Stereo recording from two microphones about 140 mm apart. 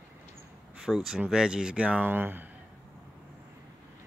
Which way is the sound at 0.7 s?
5° right (ahead or behind).